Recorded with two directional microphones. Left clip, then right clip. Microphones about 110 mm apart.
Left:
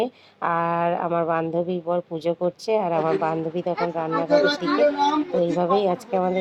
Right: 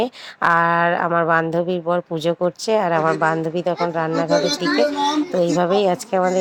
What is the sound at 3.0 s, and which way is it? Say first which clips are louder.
Speech: right 5 dB; 35° right (ahead or behind).